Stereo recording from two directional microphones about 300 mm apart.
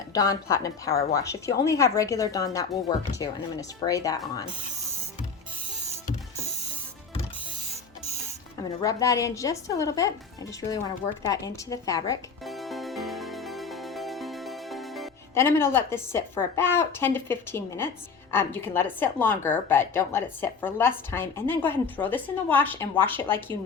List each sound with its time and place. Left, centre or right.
0.1 s a woman's voice: centre
8.5 s a woman's voice: centre
11.3 s a woman's voice: centre
12.5 s music: centre